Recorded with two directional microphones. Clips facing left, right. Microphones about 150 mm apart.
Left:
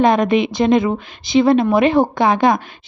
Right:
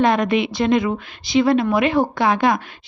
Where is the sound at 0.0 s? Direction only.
20° left (ahead or behind).